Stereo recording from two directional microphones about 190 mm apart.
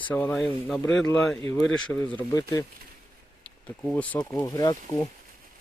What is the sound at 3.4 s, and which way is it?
Speech, 5° left (ahead or behind).